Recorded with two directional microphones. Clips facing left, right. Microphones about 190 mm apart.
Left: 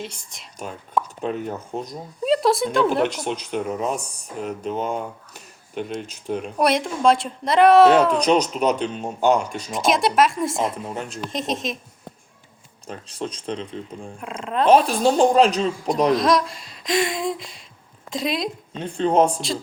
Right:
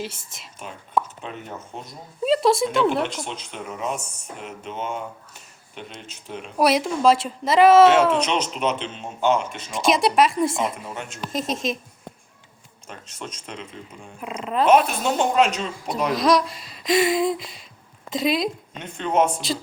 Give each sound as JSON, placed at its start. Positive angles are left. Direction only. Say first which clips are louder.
{"t": 0.0, "sound": "speech", "louder": "right 2 dB", "side_deg": -5}
{"t": 1.2, "sound": "speech", "louder": "left 8 dB", "side_deg": 40}
{"t": 2.2, "sound": "speech", "louder": "even", "side_deg": 0}
{"t": 3.2, "sound": "speech", "louder": "left 8 dB", "side_deg": 40}
{"t": 6.6, "sound": "speech", "louder": "right 2 dB", "side_deg": 0}
{"t": 8.2, "sound": "speech", "louder": "left 5 dB", "side_deg": 40}
{"t": 9.7, "sound": "speech", "louder": "even", "side_deg": 0}
{"t": 10.9, "sound": "speech", "louder": "left 4 dB", "side_deg": 35}
{"t": 11.3, "sound": "speech", "louder": "right 2 dB", "side_deg": 0}
{"t": 12.9, "sound": "speech", "louder": "left 6 dB", "side_deg": 35}
{"t": 14.2, "sound": "speech", "louder": "even", "side_deg": -5}
{"t": 14.7, "sound": "speech", "louder": "left 3 dB", "side_deg": 35}
{"t": 16.1, "sound": "speech", "louder": "even", "side_deg": 0}
{"t": 18.7, "sound": "speech", "louder": "left 4 dB", "side_deg": 35}